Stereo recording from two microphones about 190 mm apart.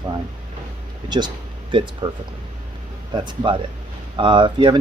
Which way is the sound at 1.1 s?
25° right (ahead or behind).